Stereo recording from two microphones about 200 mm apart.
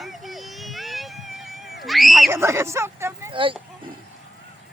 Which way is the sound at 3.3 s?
25° right (ahead or behind).